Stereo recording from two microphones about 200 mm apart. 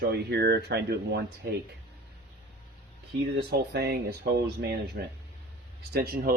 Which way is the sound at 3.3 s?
55° right (ahead or behind).